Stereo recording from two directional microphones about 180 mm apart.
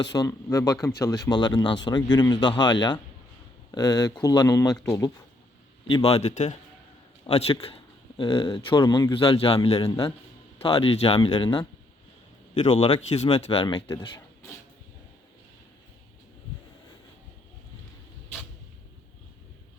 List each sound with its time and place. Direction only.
0.0 s speech: 20° left (ahead or behind)
5.9 s speech: 35° left (ahead or behind)